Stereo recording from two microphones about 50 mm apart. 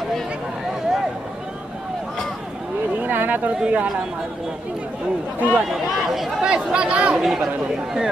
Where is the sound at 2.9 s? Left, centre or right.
Right.